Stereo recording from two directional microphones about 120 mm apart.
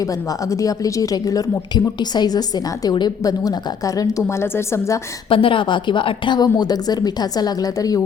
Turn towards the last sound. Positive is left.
turn(degrees=30)  # may be behind; listen again after turning